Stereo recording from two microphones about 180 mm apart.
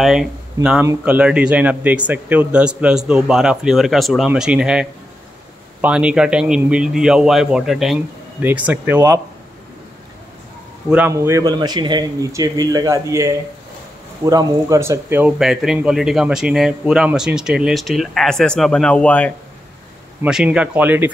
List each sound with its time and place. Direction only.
0.0 s speech: centre (ahead or behind)
0.6 s a man's voice: 20° right (ahead or behind)
1.0 s speech: 5° right (ahead or behind)
10.9 s speech: 10° right (ahead or behind); by 19.3 s 5° left (ahead or behind)
20.2 s speech: 5° right (ahead or behind)